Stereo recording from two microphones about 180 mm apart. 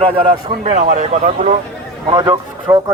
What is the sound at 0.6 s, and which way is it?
Speech, 40° right (ahead or behind).